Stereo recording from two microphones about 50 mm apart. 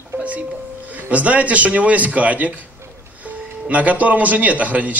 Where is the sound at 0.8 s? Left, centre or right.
Right.